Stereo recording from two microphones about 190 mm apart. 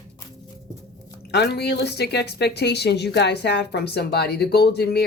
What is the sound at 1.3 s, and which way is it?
Speech, 60° left (ahead or behind).